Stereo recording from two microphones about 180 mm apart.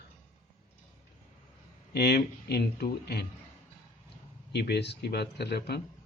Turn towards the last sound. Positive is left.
turn(degrees=65)  # may be behind; listen again after turning